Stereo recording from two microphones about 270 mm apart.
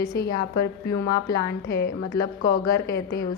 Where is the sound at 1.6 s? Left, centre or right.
Left.